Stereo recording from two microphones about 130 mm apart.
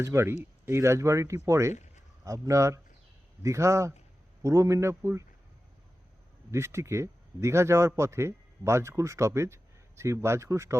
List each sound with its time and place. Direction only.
0.0 s speech: 20° right (ahead or behind)
1.7 s a sound: 65° left (ahead or behind)
2.2 s speech: 25° right (ahead or behind)
6.5 s speech: 20° right (ahead or behind)